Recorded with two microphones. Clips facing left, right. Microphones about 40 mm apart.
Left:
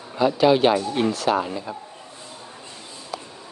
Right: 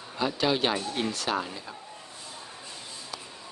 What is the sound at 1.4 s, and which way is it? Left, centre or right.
Speech, centre.